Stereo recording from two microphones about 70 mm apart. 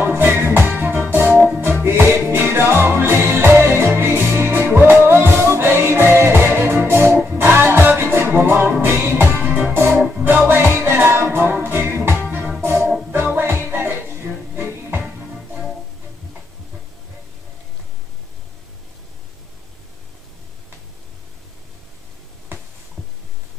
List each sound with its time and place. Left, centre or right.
0.0 s music: right
9.8 s music: right